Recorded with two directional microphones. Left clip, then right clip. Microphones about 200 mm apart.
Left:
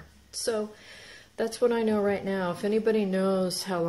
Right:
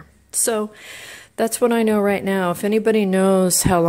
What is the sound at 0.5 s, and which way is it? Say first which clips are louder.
Speech: right 7 dB; 40° right (ahead or behind).